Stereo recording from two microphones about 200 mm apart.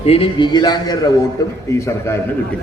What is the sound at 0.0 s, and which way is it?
A man's voice, 30° left (ahead or behind).